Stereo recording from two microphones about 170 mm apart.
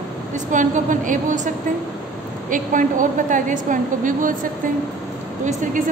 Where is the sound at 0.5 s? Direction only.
50° right (ahead or behind).